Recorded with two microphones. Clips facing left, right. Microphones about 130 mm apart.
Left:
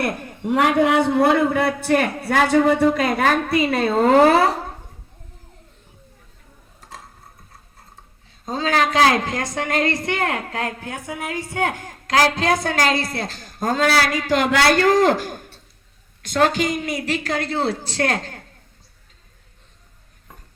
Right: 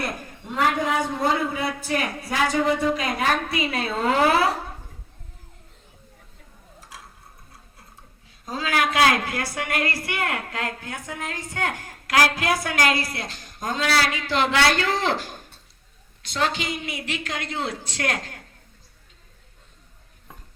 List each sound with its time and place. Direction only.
0.0 s a man's voice: 65° left (ahead or behind); by 4.5 s 45° left (ahead or behind)
8.4 s a woman's voice: 25° left (ahead or behind)
12.1 s a woman's voice: 25° left (ahead or behind)